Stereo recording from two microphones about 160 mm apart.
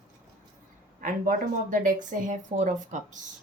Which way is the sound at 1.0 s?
55° right (ahead or behind).